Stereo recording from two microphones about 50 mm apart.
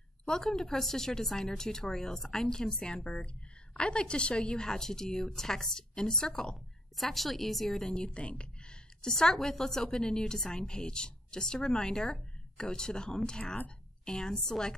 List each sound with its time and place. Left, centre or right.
0.2 s a woman's voice: centre
2.8 s a woman's voice: left; by 7.9 s centre
7.9 s speech: left
9.0 s a woman's voice: centre
13.4 s speech: left
14.0 s a woman's voice: centre